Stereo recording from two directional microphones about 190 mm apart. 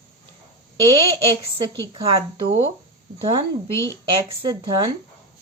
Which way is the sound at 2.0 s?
30° right (ahead or behind).